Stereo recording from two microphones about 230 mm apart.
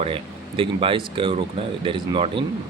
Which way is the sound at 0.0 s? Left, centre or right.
Right.